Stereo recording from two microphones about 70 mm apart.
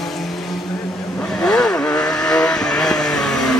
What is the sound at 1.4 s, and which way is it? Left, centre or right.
Vehicle, centre.